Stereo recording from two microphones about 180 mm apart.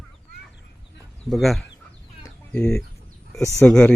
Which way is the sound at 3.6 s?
5° left (ahead or behind).